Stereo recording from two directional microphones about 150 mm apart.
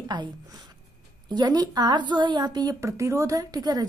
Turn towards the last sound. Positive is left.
turn(degrees=-25)  # may be behind; listen again after turning